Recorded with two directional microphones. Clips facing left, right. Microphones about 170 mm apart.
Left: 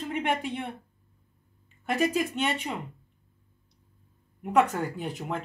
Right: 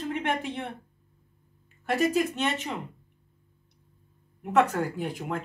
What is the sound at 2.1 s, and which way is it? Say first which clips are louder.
Speech: right 1 dB; centre (ahead or behind).